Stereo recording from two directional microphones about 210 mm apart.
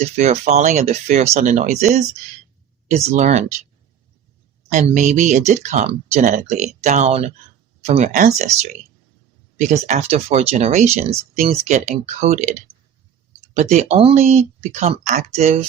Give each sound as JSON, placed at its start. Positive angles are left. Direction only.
{"t": 0.2, "sound": "speech", "side_deg": -30}
{"t": 4.7, "sound": "speech", "side_deg": -35}
{"t": 9.6, "sound": "speech", "side_deg": -35}